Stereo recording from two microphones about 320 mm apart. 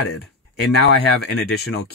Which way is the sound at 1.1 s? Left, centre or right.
Left.